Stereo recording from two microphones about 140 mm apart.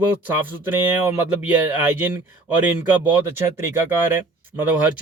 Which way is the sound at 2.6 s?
10° right (ahead or behind).